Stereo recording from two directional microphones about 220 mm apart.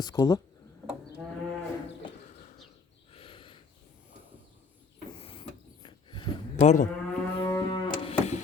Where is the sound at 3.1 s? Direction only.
25° left (ahead or behind).